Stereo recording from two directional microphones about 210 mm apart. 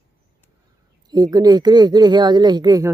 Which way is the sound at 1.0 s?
20° right (ahead or behind).